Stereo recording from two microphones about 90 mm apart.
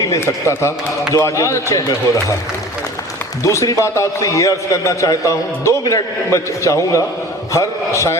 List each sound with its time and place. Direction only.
0.0 s a man's voice: 35° left (ahead or behind)
3.4 s a man's voice: 35° left (ahead or behind)